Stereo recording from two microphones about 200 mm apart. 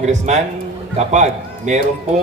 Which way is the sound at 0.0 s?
35° right (ahead or behind).